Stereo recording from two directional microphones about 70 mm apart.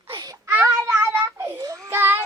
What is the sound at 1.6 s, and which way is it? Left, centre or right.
Child singing, right.